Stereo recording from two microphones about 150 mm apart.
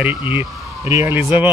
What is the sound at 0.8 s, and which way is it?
Speech, 15° right (ahead or behind).